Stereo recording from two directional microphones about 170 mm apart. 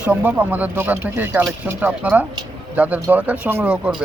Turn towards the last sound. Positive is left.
turn(degrees=-5)  # may be behind; listen again after turning